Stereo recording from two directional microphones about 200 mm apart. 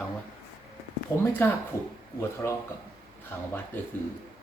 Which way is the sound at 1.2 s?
10° left (ahead or behind).